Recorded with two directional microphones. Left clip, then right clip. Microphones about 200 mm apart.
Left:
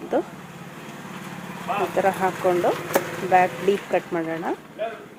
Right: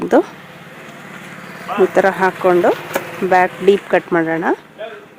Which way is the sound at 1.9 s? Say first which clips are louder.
Right 5 dB; 45° right (ahead or behind).